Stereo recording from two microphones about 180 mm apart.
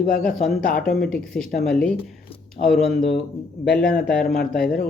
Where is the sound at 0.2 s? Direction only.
5° left (ahead or behind).